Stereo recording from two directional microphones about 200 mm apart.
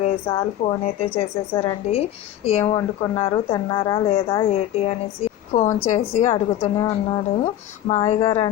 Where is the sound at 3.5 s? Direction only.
20° left (ahead or behind).